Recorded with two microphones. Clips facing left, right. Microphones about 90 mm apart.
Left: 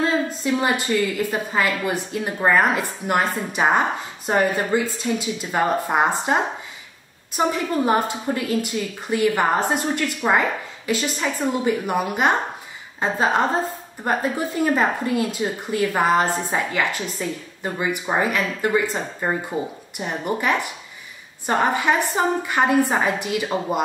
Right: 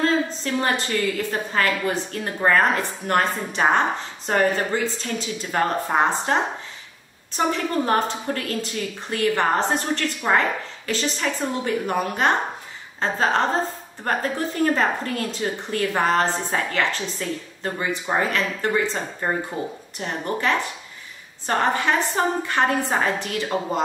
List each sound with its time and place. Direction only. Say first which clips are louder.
0.0 s a woman's voice: even; 10° left (ahead or behind)